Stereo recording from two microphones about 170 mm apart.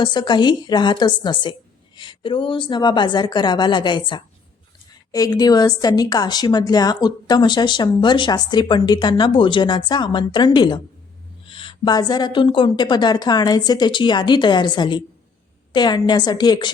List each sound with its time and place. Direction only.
0.0 s a woman's voice: 25° left (ahead or behind)